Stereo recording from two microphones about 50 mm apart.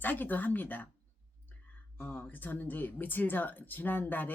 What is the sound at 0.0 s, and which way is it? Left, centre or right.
Speech, left.